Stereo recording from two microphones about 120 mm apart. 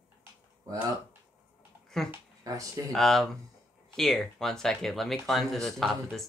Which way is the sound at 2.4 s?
30° right (ahead or behind).